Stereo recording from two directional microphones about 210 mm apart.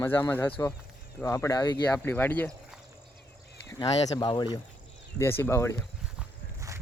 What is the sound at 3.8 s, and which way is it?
Speech, 20° left (ahead or behind).